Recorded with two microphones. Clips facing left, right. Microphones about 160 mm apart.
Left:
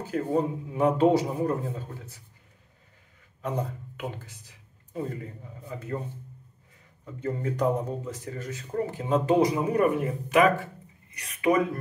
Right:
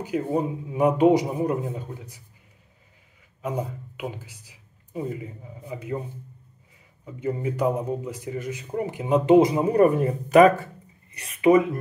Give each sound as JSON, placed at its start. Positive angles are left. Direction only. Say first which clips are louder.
{"t": 0.0, "sound": "speech", "louder": "right 1 dB", "side_deg": -15}
{"t": 3.4, "sound": "a man's voice", "louder": "right 2 dB", "side_deg": -10}
{"t": 7.1, "sound": "speech", "louder": "right 3 dB", "side_deg": -10}
{"t": 10.3, "sound": "speech", "louder": "right 6 dB", "side_deg": -40}
{"t": 11.1, "sound": "speech", "louder": "right 6 dB", "side_deg": -30}